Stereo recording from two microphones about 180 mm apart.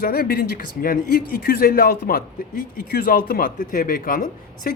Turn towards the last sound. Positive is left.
turn(degrees=50)  # may be behind; listen again after turning